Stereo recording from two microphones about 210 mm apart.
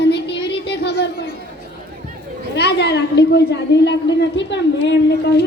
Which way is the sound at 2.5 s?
55° left (ahead or behind).